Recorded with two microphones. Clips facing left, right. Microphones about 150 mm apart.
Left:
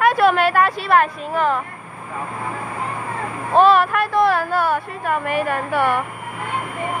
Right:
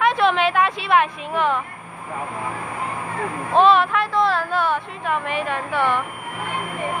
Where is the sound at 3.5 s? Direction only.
5° left (ahead or behind).